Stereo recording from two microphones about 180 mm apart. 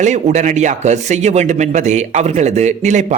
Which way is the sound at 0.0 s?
40° right (ahead or behind).